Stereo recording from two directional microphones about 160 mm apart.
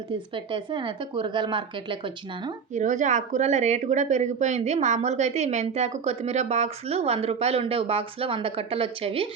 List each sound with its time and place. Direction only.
0.3 s a woman's voice: 30° right (ahead or behind)
2.7 s speech: 50° right (ahead or behind)